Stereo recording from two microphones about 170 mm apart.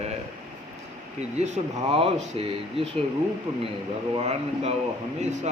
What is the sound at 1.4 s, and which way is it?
Speech, 40° right (ahead or behind).